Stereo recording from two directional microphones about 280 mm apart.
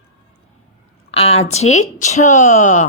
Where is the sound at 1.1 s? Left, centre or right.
Left.